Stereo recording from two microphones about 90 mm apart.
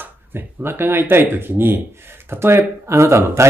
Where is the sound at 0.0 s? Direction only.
20° right (ahead or behind).